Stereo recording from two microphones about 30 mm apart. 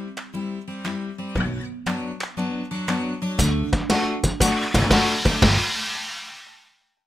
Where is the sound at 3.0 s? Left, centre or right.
Left.